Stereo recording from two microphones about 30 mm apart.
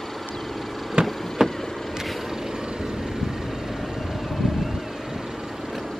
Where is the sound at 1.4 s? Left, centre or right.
Centre.